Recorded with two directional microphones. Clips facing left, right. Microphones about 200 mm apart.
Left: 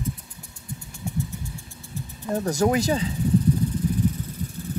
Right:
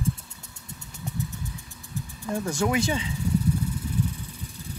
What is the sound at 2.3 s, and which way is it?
Speech, 40° left (ahead or behind).